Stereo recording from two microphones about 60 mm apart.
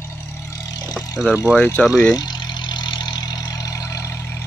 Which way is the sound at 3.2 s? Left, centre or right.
Left.